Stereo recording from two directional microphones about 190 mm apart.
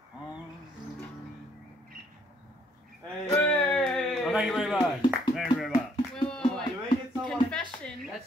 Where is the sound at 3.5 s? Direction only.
5° left (ahead or behind).